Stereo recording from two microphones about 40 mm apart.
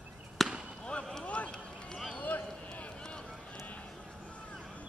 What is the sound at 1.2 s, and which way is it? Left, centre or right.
Run, left.